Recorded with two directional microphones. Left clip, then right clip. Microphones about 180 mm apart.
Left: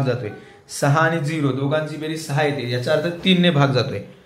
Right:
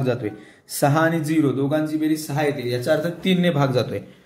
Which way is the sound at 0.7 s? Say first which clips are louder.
Left 1 dB; 40° right (ahead or behind).